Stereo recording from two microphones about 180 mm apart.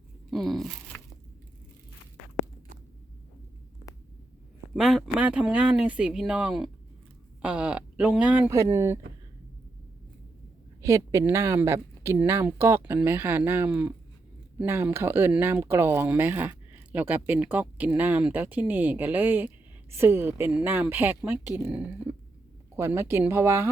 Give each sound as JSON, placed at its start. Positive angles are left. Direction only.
{"t": 0.3, "sound": "a sound", "side_deg": 0}
{"t": 4.7, "sound": "speech", "side_deg": 0}
{"t": 10.8, "sound": "a woman's voice", "side_deg": -15}